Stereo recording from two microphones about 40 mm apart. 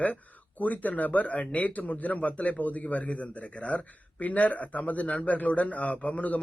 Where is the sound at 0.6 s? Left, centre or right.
Left.